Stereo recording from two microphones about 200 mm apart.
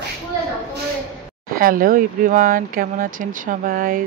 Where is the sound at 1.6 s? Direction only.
45° right (ahead or behind).